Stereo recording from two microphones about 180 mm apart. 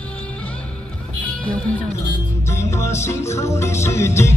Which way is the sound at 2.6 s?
15° left (ahead or behind).